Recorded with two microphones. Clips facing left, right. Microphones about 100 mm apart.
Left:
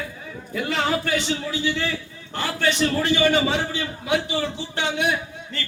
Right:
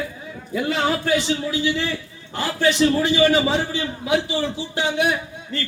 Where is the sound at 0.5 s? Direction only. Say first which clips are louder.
Right 2 dB; 10° right (ahead or behind).